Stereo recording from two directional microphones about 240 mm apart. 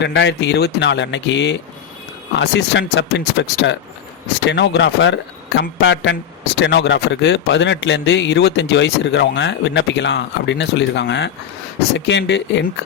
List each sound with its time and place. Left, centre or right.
0.0 s a man's voice: left